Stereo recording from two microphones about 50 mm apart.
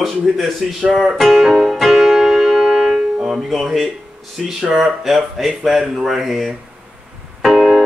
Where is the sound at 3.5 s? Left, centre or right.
Centre.